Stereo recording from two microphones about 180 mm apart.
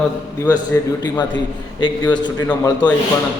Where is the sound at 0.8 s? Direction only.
15° left (ahead or behind).